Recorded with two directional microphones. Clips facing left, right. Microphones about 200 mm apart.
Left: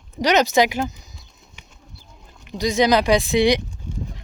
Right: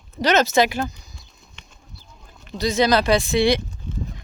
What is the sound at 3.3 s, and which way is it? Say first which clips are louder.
Speech: left 1 dB; 15° left (ahead or behind).